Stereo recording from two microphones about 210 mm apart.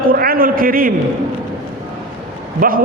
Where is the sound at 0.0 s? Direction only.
45° right (ahead or behind).